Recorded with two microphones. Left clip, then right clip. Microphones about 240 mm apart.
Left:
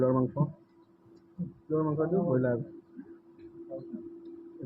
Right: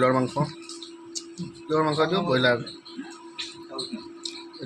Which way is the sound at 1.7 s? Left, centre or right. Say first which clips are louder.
Right 6 dB; right.